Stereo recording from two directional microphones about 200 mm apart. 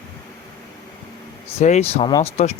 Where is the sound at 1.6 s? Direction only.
35° left (ahead or behind).